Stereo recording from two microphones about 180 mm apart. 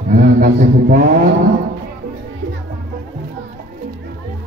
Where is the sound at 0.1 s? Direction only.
50° right (ahead or behind).